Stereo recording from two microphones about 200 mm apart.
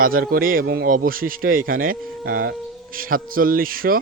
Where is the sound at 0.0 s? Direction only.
45° right (ahead or behind).